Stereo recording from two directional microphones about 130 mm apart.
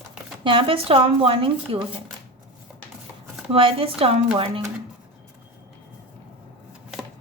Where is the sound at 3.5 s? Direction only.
45° right (ahead or behind).